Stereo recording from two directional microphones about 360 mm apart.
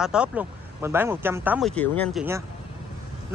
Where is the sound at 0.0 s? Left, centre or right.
Centre.